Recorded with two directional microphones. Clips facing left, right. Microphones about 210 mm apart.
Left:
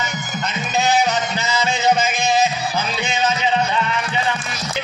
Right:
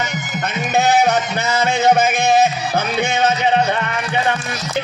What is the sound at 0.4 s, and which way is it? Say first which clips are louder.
Music: right 4 dB; 60° right (ahead or behind).